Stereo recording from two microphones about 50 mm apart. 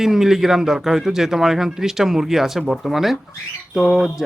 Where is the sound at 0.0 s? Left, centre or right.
Centre.